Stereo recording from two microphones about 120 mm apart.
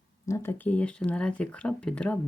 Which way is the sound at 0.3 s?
20° left (ahead or behind).